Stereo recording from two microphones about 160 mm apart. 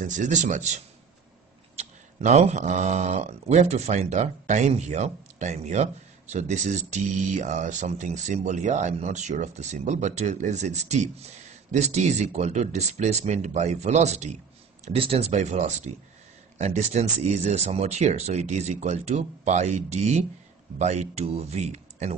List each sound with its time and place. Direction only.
0.0 s speech: 50° right (ahead or behind)